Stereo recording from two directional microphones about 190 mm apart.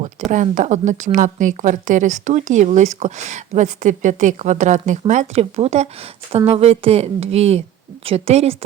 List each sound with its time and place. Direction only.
0.0 s a woman's voice: 40° right (ahead or behind)